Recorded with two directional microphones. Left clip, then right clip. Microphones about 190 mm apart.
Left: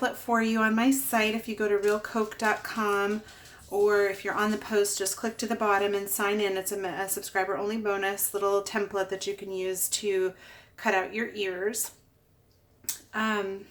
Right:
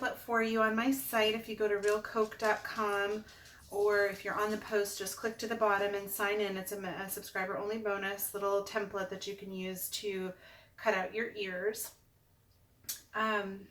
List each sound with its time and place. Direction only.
0.0 s speech: 50° left (ahead or behind)